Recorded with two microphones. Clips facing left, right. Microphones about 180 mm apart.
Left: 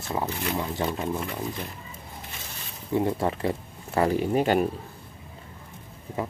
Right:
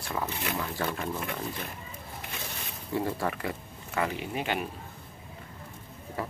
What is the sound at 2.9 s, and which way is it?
Speech, 20° left (ahead or behind).